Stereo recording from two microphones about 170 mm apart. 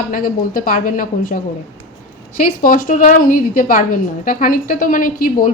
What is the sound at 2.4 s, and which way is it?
A woman's voice, 55° left (ahead or behind).